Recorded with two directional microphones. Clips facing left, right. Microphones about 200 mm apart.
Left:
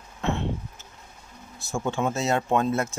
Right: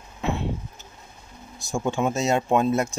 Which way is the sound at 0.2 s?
5° right (ahead or behind).